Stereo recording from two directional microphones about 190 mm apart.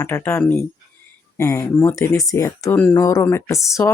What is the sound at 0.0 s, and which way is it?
Speech, 10° left (ahead or behind).